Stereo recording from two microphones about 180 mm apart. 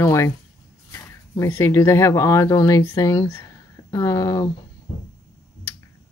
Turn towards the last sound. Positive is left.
turn(degrees=20)  # may be behind; listen again after turning